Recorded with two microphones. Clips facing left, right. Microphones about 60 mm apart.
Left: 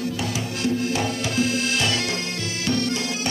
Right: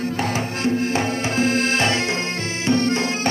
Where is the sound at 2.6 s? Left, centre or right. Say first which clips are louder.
Right 5 dB; right.